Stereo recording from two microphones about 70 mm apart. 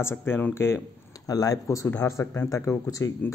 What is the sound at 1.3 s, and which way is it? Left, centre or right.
Speech, left.